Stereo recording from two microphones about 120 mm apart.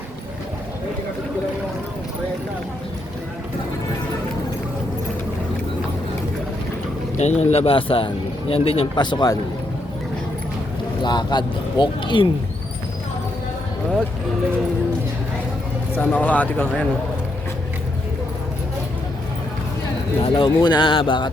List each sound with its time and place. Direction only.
7.2 s speech: 70° left (ahead or behind)
9.0 s speech: 40° left (ahead or behind)
11.0 s speech: 35° left (ahead or behind)
16.0 s speech: 15° left (ahead or behind)
20.2 s speech: 40° left (ahead or behind)